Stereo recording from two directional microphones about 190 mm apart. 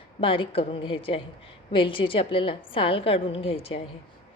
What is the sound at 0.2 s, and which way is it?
A woman's voice, 30° left (ahead or behind).